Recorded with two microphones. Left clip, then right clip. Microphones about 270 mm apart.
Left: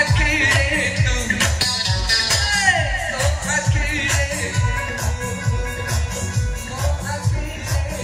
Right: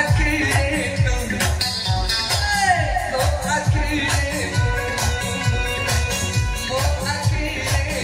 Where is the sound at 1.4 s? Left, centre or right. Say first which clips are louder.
Left 2 dB; centre.